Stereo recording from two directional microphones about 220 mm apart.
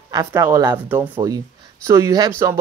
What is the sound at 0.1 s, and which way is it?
Speech, 15° right (ahead or behind).